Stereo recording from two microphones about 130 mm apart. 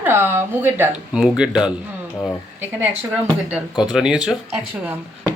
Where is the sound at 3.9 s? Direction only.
5° right (ahead or behind).